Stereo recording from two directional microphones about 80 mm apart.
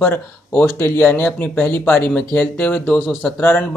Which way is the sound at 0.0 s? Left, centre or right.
Left.